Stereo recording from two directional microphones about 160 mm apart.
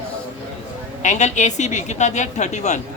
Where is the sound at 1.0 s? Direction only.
45° left (ahead or behind).